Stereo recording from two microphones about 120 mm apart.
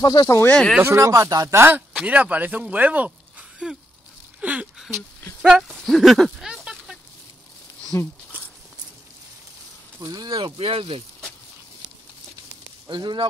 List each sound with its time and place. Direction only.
0.0 s speech: 35° left (ahead or behind)
0.4 s speech: 10° left (ahead or behind)
0.7 s speech: 20° right (ahead or behind)
5.4 s a sound: 5° right (ahead or behind)
9.9 s speech: 30° right (ahead or behind)
10.3 s speech: 50° right (ahead or behind)
12.8 s speech: 40° right (ahead or behind)